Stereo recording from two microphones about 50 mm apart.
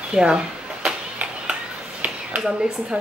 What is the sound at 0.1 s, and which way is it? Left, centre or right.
Speech, centre.